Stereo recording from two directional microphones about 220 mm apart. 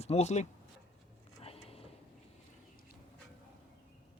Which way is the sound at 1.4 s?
25° left (ahead or behind).